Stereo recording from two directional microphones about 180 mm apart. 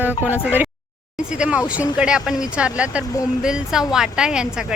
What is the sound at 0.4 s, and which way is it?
A woman's voice, 10° right (ahead or behind).